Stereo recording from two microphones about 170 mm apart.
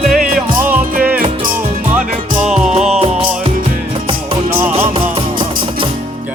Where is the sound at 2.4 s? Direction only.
5° right (ahead or behind).